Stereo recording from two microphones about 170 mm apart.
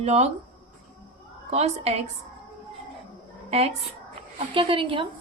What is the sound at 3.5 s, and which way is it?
A woman's voice, 35° right (ahead or behind).